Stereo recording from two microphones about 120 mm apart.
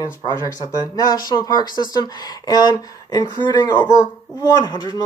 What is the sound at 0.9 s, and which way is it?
Speech, 35° left (ahead or behind).